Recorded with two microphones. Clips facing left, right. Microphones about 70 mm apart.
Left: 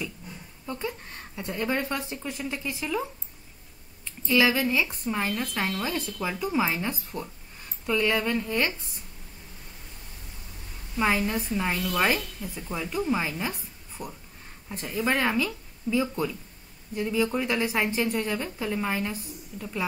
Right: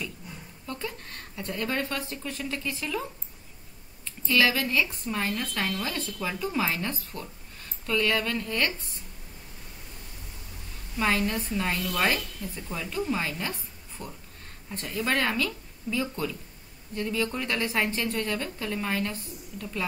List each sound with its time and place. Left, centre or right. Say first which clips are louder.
0.7 s speech: left 3 dB; centre
11.0 s speech: left 1 dB; centre